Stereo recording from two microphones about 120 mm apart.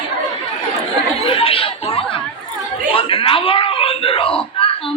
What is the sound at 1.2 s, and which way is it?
Chatter, 50° left (ahead or behind).